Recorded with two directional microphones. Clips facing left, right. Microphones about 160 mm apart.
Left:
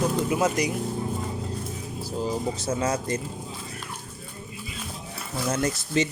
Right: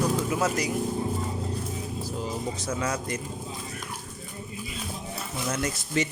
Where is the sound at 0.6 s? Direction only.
15° left (ahead or behind).